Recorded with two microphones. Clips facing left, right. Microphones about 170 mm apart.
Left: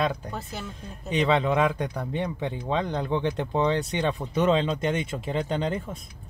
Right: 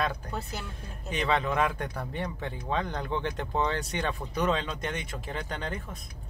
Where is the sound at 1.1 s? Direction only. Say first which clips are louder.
Left 5 dB; 20° left (ahead or behind).